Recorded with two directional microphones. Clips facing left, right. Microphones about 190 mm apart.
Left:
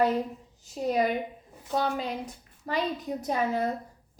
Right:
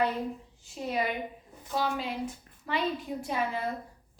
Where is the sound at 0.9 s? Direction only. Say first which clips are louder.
Left 5 dB; 45° left (ahead or behind).